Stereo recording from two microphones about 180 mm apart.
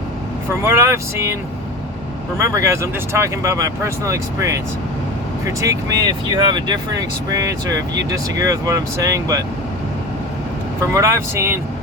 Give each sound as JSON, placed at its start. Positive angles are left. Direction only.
{"t": 0.6, "sound": "speech", "side_deg": -15}
{"t": 2.4, "sound": "speech", "side_deg": -15}
{"t": 10.8, "sound": "speech", "side_deg": -15}